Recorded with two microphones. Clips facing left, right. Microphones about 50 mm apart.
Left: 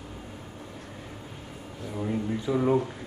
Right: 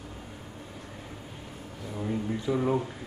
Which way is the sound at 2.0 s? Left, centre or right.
Centre.